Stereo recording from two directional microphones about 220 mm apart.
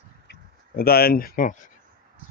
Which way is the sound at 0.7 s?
45° left (ahead or behind).